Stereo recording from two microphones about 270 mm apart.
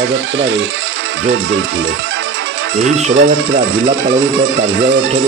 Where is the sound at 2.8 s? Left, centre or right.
Right.